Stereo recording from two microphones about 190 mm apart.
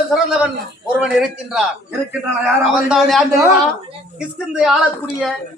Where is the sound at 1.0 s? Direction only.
5° right (ahead or behind).